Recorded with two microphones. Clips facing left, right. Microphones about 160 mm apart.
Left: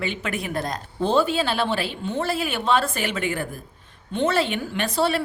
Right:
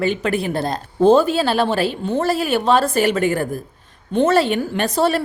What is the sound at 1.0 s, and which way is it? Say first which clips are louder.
A woman's voice: right 7 dB; 45° right (ahead or behind).